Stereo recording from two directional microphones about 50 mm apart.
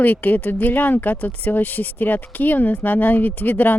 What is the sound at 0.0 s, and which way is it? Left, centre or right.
Speech, left.